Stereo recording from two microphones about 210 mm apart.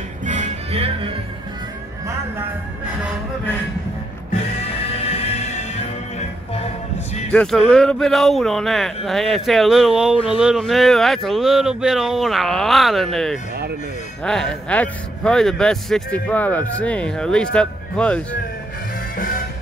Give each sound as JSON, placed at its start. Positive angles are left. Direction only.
{"t": 0.2, "sound": "music", "side_deg": -35}
{"t": 4.9, "sound": "music", "side_deg": 30}
{"t": 7.3, "sound": "a man's voice", "side_deg": 5}
{"t": 19.1, "sound": "music", "side_deg": 40}